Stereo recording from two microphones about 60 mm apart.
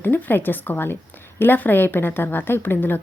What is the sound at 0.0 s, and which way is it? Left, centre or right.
A woman's voice, left.